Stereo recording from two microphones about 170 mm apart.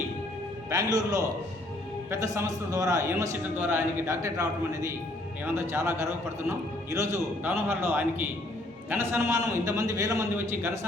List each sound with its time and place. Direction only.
0.7 s a man's voice: 20° right (ahead or behind)